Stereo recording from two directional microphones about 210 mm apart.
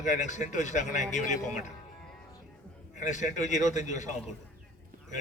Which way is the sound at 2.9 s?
35° left (ahead or behind).